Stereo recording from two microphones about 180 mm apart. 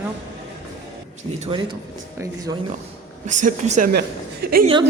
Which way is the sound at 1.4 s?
30° right (ahead or behind).